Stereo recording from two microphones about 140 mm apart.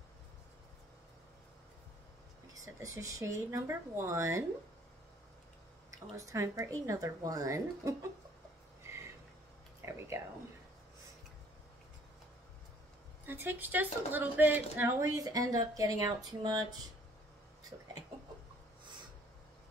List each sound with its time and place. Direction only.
2.5 s speech: 25° right (ahead or behind)
5.9 s a woman's voice: 20° right (ahead or behind)
9.8 s a sound: 20° right (ahead or behind)
13.3 s a woman's voice: 15° right (ahead or behind); by 16.6 s 30° right (ahead or behind)